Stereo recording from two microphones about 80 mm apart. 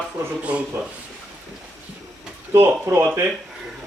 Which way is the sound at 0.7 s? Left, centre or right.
Right.